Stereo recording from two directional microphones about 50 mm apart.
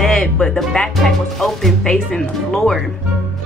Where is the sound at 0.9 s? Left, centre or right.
Centre.